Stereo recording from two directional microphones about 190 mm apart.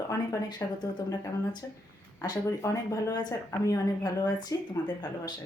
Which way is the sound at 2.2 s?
20° left (ahead or behind).